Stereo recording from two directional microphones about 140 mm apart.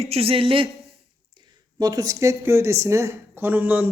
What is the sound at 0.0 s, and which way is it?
Speech, 45° right (ahead or behind).